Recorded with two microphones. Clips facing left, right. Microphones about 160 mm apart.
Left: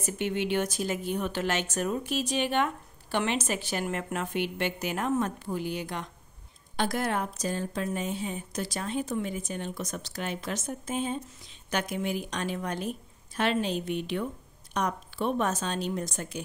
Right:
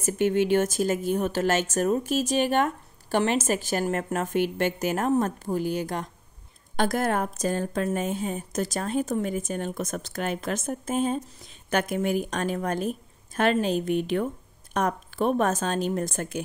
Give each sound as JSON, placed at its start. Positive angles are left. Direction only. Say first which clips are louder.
{"t": 0.0, "sound": "a woman's voice", "louder": "right 7 dB", "side_deg": -45}